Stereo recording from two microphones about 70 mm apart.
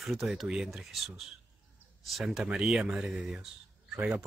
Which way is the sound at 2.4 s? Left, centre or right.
Centre.